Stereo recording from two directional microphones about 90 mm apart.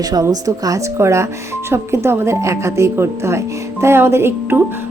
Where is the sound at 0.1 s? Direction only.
45° right (ahead or behind).